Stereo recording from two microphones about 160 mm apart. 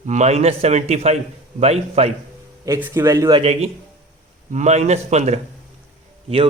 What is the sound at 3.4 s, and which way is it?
A man's voice, 40° right (ahead or behind).